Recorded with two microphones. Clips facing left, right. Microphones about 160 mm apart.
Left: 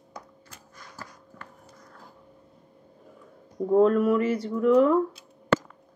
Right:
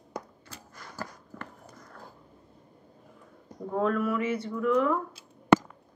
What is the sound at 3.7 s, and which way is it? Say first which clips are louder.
Speech: left 7 dB; 35° left (ahead or behind).